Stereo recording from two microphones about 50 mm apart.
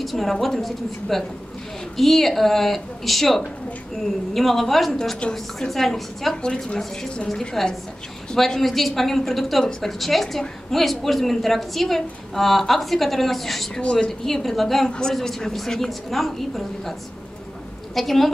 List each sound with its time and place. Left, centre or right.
0.0 s a woman's voice: centre
6.3 s a woman's voice: centre
14.9 s a woman's voice: centre
17.9 s a woman's voice: centre